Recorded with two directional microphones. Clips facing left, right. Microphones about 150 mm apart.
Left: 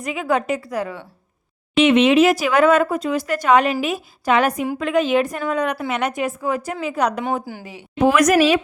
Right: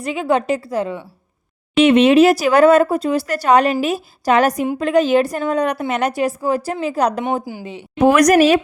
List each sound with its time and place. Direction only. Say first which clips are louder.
0.0 s a woman's voice: right 3 dB; 30° right (ahead or behind)
1.7 s speech: right 3 dB; 35° right (ahead or behind)
7.4 s a woman's voice: right 4 dB; 20° right (ahead or behind)
8.0 s a woman's voice: right 3 dB; 40° right (ahead or behind)